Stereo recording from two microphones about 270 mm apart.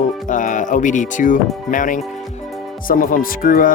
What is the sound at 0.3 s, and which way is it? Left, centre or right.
Speech, left.